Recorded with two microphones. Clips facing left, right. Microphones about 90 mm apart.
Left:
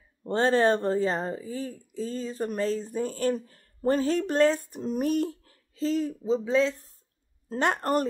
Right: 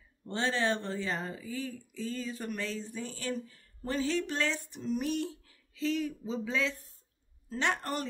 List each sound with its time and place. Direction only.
0.2 s a woman's voice: 45° left (ahead or behind)